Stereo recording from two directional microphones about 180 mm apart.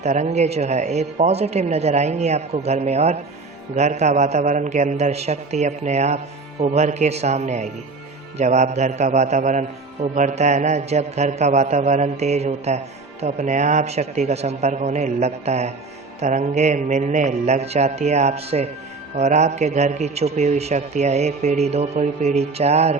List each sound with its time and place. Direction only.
0.0 s a man's voice: 40° right (ahead or behind)